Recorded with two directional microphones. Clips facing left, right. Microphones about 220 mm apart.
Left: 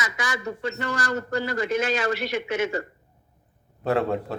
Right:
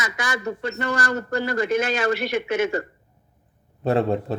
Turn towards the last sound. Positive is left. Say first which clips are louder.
# right 3 dB
turn(degrees=-20)  # may be behind; listen again after turning